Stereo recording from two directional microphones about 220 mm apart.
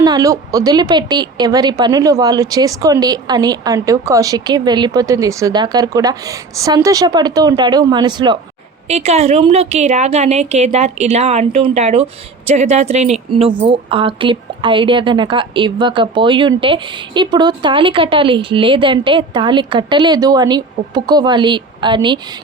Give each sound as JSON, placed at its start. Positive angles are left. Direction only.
{"t": 0.0, "sound": "a woman's voice", "side_deg": -15}